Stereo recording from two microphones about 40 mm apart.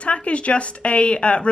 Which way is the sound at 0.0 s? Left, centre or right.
Left.